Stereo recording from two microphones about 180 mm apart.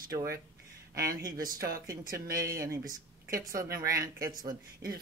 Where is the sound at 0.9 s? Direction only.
20° right (ahead or behind).